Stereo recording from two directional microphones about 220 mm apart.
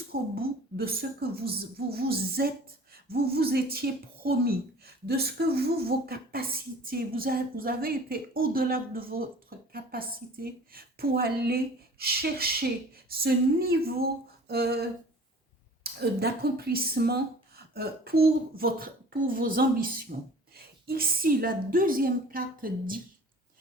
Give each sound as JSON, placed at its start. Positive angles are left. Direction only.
{"t": 0.1, "sound": "a woman's voice", "side_deg": -45}